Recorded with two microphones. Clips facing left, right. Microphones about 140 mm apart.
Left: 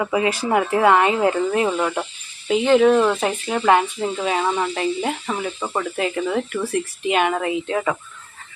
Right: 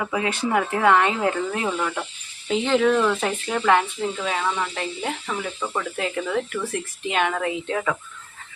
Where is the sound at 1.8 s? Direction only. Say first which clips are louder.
Left 4 dB; 25° left (ahead or behind).